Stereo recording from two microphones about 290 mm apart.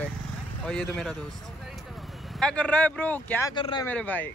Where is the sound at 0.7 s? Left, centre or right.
Centre.